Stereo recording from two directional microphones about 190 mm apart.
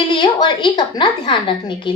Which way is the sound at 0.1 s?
25° left (ahead or behind).